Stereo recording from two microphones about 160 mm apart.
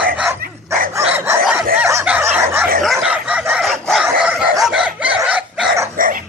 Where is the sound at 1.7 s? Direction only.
15° right (ahead or behind).